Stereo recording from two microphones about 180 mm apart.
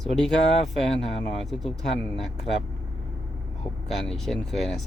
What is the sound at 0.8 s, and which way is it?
Speech, centre (ahead or behind).